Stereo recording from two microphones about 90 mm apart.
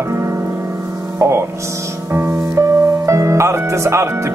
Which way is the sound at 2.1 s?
20° right (ahead or behind).